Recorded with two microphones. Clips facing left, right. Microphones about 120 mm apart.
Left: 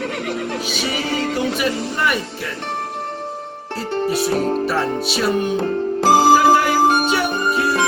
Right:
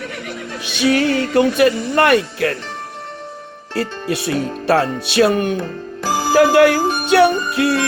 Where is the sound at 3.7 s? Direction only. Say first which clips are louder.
Left 1 dB; 70° right (ahead or behind).